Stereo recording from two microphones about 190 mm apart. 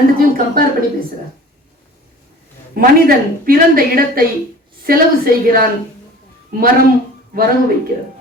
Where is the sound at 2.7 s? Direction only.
50° right (ahead or behind).